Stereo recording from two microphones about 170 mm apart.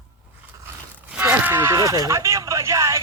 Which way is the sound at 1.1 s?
10° right (ahead or behind).